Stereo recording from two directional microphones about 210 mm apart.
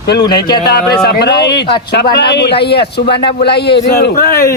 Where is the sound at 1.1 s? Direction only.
50° left (ahead or behind).